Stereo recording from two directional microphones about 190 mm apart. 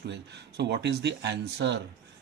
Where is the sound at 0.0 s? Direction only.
65° right (ahead or behind).